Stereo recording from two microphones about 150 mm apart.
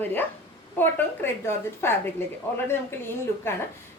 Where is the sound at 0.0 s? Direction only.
10° left (ahead or behind).